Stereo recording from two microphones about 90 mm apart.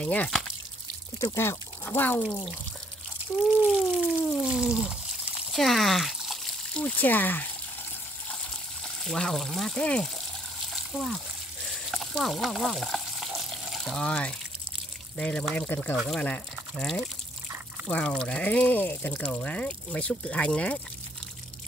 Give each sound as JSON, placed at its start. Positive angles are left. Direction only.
{"t": 0.0, "sound": "speech", "side_deg": 15}
{"t": 1.3, "sound": "speech", "side_deg": 30}
{"t": 3.6, "sound": "a sound", "side_deg": 0}
{"t": 6.8, "sound": "speech", "side_deg": 20}
{"t": 8.8, "sound": "speech", "side_deg": 5}
{"t": 10.7, "sound": "water", "side_deg": 0}
{"t": 11.6, "sound": "frying", "side_deg": 0}
{"t": 13.9, "sound": "speech", "side_deg": 10}
{"t": 17.8, "sound": "speech", "side_deg": 10}